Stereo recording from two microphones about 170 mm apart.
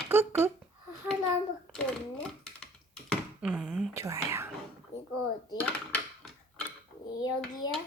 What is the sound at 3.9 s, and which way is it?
Whispering, 20° right (ahead or behind).